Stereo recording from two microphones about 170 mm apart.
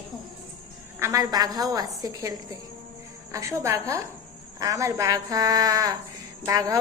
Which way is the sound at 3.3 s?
20° right (ahead or behind).